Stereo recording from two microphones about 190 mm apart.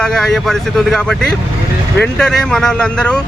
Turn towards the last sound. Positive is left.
turn(degrees=5)  # may be behind; listen again after turning